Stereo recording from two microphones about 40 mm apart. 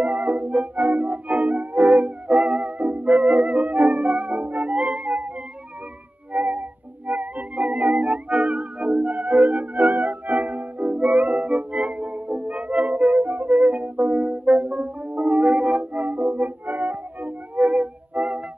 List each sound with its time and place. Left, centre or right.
0.0 s music: right
6.3 s music: right